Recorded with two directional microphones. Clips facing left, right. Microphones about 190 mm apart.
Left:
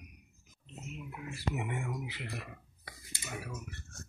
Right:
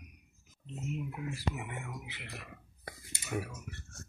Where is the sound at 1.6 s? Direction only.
30° left (ahead or behind).